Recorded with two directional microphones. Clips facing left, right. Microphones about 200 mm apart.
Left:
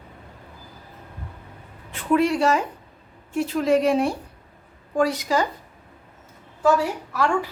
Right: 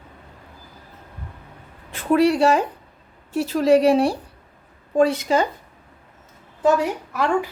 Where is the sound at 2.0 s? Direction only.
35° right (ahead or behind).